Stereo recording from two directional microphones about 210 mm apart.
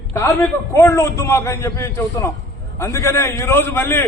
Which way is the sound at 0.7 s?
15° left (ahead or behind).